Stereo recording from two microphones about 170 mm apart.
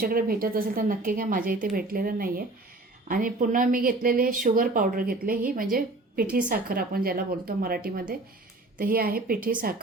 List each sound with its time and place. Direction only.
0.0 s speech: 60° right (ahead or behind)